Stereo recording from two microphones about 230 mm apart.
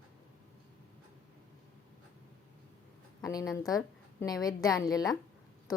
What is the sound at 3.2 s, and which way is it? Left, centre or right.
A woman's voice, centre.